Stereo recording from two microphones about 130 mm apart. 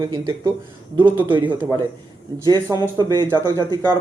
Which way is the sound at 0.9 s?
15° right (ahead or behind).